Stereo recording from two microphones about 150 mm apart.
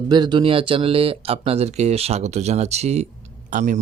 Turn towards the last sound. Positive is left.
turn(degrees=-55)  # may be behind; listen again after turning